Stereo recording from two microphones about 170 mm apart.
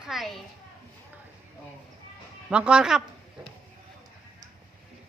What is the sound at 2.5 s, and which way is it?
Speech, 5° right (ahead or behind).